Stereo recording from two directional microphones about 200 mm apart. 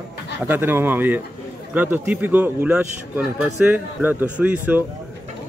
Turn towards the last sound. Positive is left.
turn(degrees=-10)  # may be behind; listen again after turning